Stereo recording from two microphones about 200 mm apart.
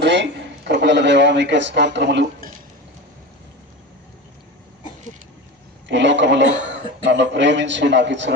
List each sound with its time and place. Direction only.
0.0 s speech: 60° right (ahead or behind)
5.9 s a man's voice: 60° right (ahead or behind)